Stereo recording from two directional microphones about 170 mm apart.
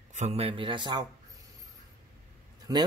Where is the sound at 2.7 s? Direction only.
20° right (ahead or behind).